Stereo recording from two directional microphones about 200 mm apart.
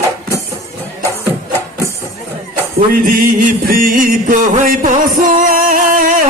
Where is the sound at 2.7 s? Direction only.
45° right (ahead or behind).